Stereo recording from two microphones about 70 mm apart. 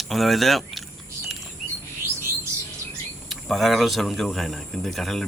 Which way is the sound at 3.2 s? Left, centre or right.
Centre.